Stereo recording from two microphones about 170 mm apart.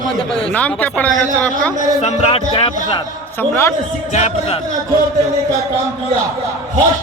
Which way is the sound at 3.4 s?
15° left (ahead or behind).